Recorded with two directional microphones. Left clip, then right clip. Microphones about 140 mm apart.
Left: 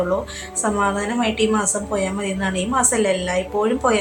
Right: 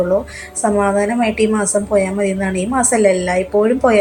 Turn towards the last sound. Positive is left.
turn(degrees=-20)  # may be behind; listen again after turning